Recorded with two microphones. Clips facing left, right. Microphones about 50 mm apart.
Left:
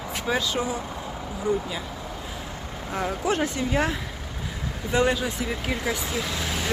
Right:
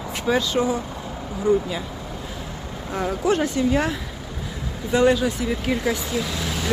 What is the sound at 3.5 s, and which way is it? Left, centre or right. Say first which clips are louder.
Speech: right 4 dB; left.